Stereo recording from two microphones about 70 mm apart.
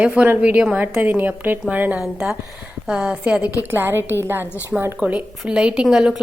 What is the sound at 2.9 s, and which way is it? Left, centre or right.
Speech, centre.